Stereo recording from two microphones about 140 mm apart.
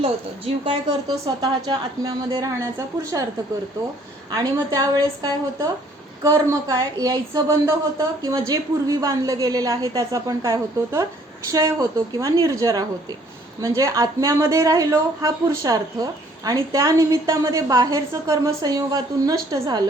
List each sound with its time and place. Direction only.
0.0 s a woman's voice: 45° right (ahead or behind)
1.4 s a woman's voice: 30° right (ahead or behind)
4.3 s a woman's voice: 25° right (ahead or behind)